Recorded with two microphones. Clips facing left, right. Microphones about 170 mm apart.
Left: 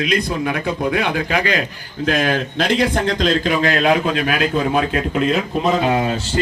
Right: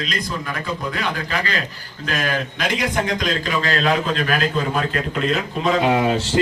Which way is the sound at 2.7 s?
60° left (ahead or behind).